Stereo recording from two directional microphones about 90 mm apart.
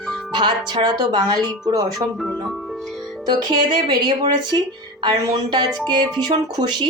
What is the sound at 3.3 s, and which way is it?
Speech, 55° right (ahead or behind).